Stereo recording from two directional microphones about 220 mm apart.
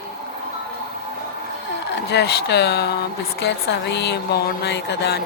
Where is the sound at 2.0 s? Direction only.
50° left (ahead or behind).